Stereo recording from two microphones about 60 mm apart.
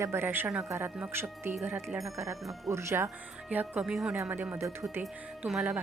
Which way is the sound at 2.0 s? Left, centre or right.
Right.